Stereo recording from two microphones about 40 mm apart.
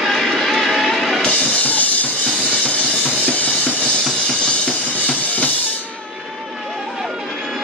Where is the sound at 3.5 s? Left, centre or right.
Left.